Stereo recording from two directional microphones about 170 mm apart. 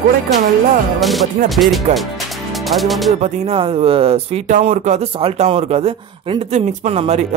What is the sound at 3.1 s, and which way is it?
Speech, 40° right (ahead or behind).